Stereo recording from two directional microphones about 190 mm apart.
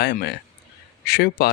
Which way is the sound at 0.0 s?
60° left (ahead or behind).